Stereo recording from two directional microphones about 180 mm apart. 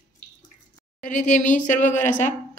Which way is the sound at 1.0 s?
45° left (ahead or behind).